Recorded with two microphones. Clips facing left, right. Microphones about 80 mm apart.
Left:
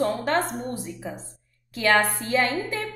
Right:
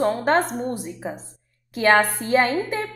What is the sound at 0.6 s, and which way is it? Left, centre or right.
Speech, right.